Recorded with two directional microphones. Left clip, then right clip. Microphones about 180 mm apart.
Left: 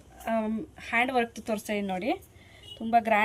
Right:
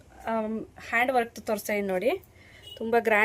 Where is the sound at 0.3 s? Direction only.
25° right (ahead or behind).